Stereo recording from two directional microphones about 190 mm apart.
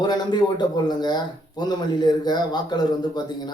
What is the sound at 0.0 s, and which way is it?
A man's voice, 20° left (ahead or behind).